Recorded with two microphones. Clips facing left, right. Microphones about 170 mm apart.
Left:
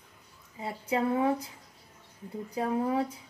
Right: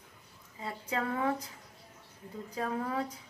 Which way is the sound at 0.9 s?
20° left (ahead or behind).